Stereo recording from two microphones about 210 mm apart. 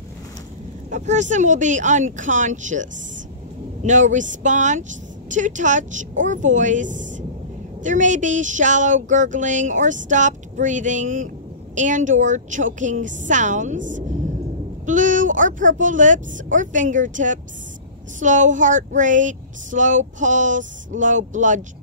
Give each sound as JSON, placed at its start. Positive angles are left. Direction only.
{"t": 0.8, "sound": "speech", "side_deg": -35}